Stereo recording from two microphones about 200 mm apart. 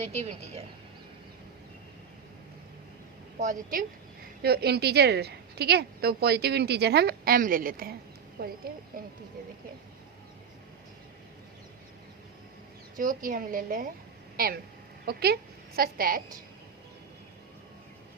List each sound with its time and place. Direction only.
0.0 s a woman's voice: 35° right (ahead or behind)
3.3 s a woman's voice: 40° right (ahead or behind)
4.4 s a woman's voice: 50° right (ahead or behind)
13.0 s a woman's voice: 45° right (ahead or behind)